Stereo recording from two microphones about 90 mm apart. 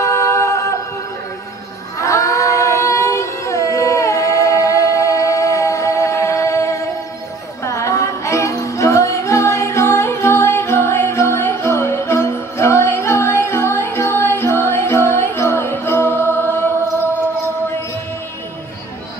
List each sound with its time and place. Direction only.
0.0 s singing: 35° left (ahead or behind)
2.0 s a sound: 35° left (ahead or behind)
7.6 s music: 35° left (ahead or behind)